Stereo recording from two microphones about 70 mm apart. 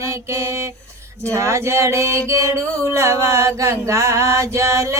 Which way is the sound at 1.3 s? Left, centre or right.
Right.